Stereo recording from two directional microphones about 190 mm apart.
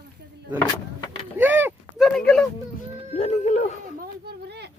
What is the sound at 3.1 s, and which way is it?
Speech, 35° left (ahead or behind).